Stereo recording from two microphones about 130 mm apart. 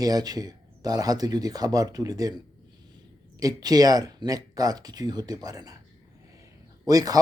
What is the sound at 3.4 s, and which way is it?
Speech, 30° right (ahead or behind).